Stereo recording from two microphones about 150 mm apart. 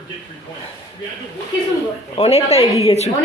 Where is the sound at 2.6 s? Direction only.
20° right (ahead or behind).